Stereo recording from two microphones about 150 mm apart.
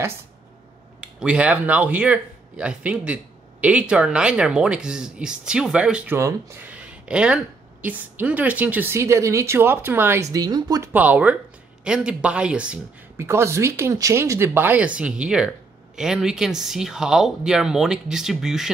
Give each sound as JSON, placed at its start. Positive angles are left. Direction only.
{"t": 1.0, "sound": "speech", "side_deg": -10}
{"t": 6.1, "sound": "speech", "side_deg": -20}
{"t": 10.3, "sound": "speech", "side_deg": -25}
{"t": 10.9, "sound": "speech", "side_deg": -10}